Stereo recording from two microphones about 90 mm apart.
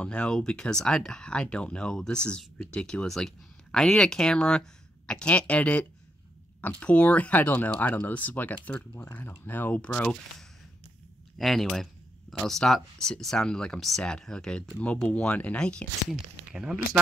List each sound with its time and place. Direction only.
0.0 s speech: 10° left (ahead or behind)
11.3 s speech: centre (ahead or behind)
16.1 s speech: 10° right (ahead or behind)